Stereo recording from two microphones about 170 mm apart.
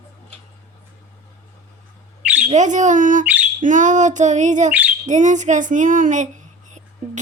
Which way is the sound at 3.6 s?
50° right (ahead or behind).